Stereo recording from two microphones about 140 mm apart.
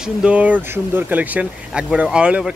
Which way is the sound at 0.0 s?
10° right (ahead or behind).